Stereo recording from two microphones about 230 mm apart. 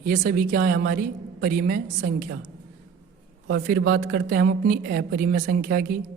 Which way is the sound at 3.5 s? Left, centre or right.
Right.